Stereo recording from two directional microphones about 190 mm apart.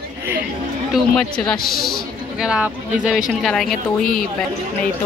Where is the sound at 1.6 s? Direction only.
50° left (ahead or behind).